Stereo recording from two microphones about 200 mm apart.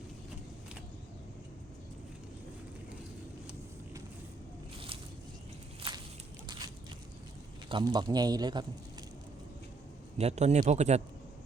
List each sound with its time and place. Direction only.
5.8 s walk: 25° right (ahead or behind)
7.7 s a man's voice: 20° right (ahead or behind)
10.2 s a man's voice: 35° right (ahead or behind)